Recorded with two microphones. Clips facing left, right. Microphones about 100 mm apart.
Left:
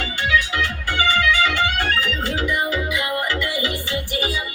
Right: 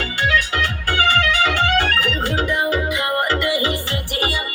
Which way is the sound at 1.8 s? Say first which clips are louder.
Right 2 dB; 70° right (ahead or behind).